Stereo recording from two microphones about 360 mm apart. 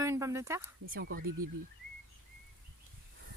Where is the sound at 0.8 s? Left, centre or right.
Right.